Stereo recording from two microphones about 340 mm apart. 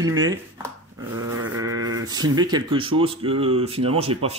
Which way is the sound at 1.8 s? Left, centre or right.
Right.